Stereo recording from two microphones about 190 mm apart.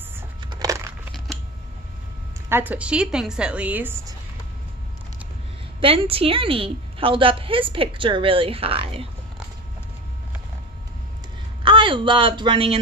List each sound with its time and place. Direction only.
0.4 s a sound: 20° right (ahead or behind)
1.1 s scissors: centre (ahead or behind)
2.5 s a woman's voice: 10° right (ahead or behind)
5.8 s a woman's voice: 30° right (ahead or behind)
11.6 s speech: 25° right (ahead or behind)